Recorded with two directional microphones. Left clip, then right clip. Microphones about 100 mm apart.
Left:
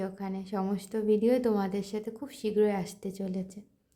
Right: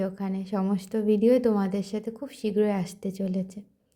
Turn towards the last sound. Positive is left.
turn(degrees=-30)  # may be behind; listen again after turning